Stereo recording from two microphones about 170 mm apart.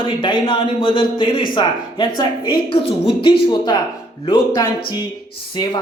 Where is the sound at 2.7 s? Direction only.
30° left (ahead or behind).